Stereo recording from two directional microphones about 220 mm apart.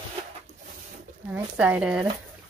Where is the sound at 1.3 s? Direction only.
5° right (ahead or behind).